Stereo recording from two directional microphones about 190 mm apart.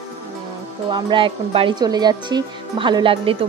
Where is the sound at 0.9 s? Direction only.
25° right (ahead or behind).